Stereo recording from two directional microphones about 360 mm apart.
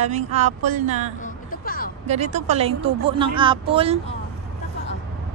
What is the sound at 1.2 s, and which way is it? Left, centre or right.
Music, left.